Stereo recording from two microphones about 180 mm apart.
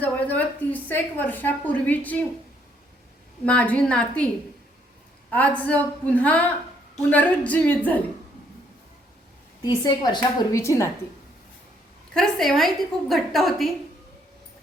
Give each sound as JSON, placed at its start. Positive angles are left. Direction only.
{"t": 0.0, "sound": "speech", "side_deg": 10}
{"t": 3.4, "sound": "speech", "side_deg": 5}
{"t": 5.3, "sound": "speech", "side_deg": 10}
{"t": 9.6, "sound": "a woman's voice", "side_deg": 25}
{"t": 12.1, "sound": "a woman's voice", "side_deg": 0}